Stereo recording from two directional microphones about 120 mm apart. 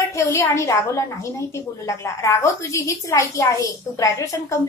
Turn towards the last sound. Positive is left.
turn(degrees=25)  # may be behind; listen again after turning